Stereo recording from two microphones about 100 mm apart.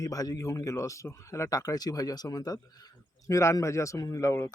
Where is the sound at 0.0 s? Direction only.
35° left (ahead or behind).